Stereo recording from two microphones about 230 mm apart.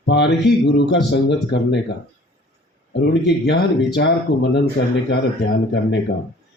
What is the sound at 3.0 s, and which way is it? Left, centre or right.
Speech, left.